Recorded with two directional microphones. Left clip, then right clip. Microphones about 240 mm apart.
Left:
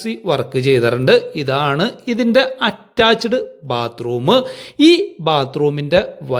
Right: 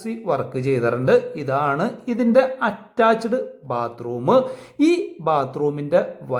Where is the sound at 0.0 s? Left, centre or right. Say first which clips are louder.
Left 4 dB; left.